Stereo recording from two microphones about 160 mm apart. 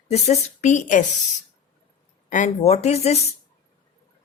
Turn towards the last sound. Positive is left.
turn(degrees=40)  # may be behind; listen again after turning